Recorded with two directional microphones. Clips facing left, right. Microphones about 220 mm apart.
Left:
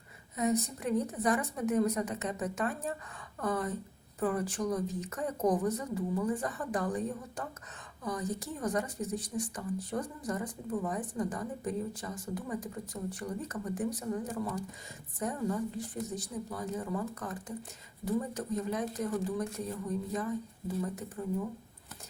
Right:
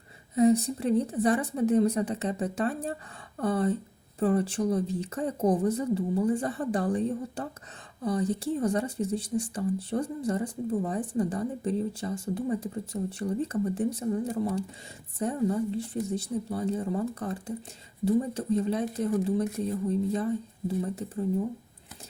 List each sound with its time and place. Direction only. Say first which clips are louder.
0.3 s a woman's voice: right 9 dB; 30° right (ahead or behind)
15.2 s a woman's voice: right 6 dB; 30° right (ahead or behind)